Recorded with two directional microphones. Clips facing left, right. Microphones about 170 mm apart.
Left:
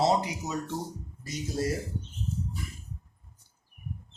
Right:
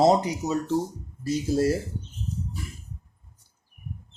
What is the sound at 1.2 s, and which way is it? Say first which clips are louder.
Speech: right 8 dB; 30° right (ahead or behind).